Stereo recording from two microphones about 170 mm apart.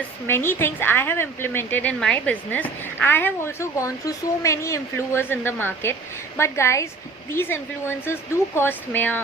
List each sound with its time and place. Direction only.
0.3 s a woman's voice: 15° left (ahead or behind)